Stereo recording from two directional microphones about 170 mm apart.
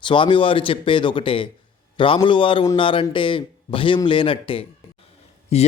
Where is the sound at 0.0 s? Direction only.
30° left (ahead or behind).